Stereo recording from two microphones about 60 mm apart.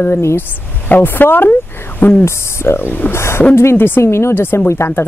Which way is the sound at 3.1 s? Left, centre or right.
Left.